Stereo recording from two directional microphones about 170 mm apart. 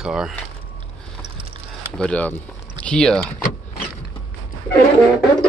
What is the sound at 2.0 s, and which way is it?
Speech, 10° left (ahead or behind).